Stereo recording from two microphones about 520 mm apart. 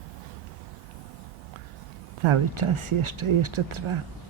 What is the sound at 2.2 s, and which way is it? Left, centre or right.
Speech, right.